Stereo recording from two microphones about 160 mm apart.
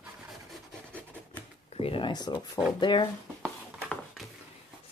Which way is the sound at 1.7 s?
35° left (ahead or behind).